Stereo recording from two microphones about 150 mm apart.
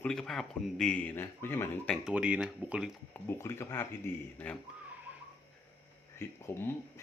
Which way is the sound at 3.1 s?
15° left (ahead or behind).